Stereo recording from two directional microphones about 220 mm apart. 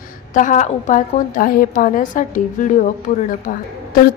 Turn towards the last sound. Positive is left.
turn(degrees=35)  # may be behind; listen again after turning